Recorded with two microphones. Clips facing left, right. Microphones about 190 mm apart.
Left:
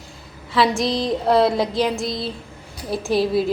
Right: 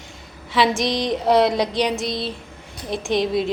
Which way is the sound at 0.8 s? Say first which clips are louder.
Left 1 dB; 30° left (ahead or behind).